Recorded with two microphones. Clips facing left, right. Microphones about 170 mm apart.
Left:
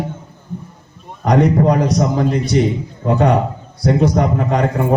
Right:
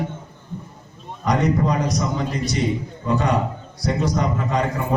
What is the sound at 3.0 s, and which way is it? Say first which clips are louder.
A man's voice: left 6 dB; 60° left (ahead or behind).